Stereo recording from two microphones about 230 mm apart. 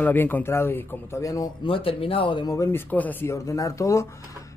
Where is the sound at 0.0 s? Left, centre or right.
Centre.